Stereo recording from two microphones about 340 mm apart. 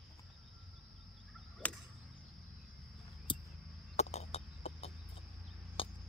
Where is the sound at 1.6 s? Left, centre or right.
Centre.